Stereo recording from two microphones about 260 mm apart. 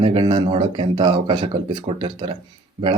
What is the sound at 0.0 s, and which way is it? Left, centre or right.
Speech, centre.